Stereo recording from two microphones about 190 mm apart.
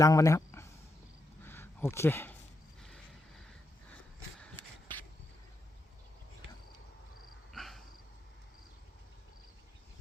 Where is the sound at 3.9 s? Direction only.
5° left (ahead or behind).